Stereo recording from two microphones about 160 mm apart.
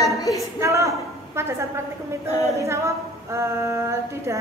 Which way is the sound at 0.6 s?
20° right (ahead or behind).